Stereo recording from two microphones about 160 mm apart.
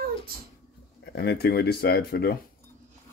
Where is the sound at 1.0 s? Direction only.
90° left.